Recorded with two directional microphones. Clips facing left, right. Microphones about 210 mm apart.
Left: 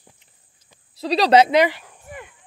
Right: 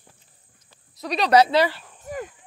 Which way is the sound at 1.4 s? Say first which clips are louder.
Left 2 dB; 20° left (ahead or behind).